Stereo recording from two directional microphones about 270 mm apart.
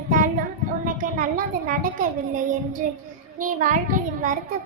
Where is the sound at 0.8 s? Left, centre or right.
Right.